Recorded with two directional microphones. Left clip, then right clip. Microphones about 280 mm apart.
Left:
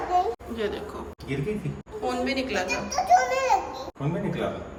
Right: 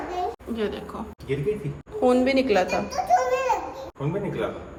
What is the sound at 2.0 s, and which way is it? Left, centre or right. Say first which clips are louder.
Speech: right 7 dB; centre.